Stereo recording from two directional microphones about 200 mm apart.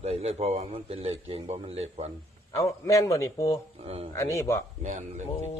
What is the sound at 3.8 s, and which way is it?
Speech, 30° right (ahead or behind).